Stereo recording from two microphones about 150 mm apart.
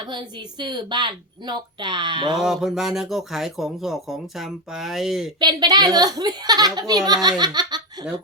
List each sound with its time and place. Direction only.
0.1 s a woman's voice: 30° right (ahead or behind)
2.4 s speech: centre (ahead or behind)
5.4 s a woman's voice: 30° right (ahead or behind)